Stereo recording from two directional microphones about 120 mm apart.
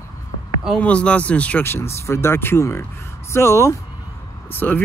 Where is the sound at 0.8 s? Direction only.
10° left (ahead or behind).